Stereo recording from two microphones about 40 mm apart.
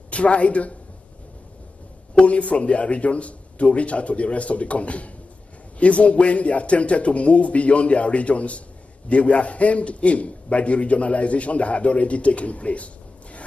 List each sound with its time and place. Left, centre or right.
0.1 s a man's voice: left
2.1 s a man's voice: left